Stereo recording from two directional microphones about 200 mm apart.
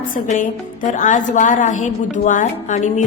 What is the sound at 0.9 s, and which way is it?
A woman's voice, 40° left (ahead or behind).